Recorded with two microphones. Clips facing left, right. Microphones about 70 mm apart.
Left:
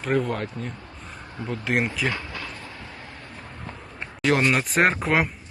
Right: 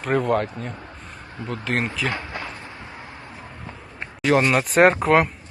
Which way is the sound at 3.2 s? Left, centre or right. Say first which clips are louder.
Right 1 dB; centre.